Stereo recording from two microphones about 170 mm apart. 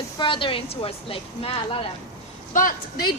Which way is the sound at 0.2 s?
30° left (ahead or behind).